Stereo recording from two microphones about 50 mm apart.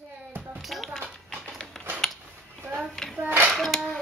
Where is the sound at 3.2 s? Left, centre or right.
Right.